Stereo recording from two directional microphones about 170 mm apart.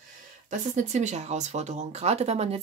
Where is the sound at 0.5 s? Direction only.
45° right (ahead or behind).